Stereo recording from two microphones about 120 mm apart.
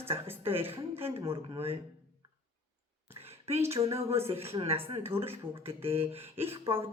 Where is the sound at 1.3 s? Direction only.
55° right (ahead or behind).